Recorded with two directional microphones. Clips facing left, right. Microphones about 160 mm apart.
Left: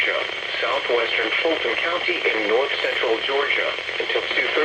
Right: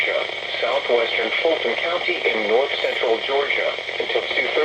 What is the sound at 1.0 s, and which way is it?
Speech, 30° right (ahead or behind).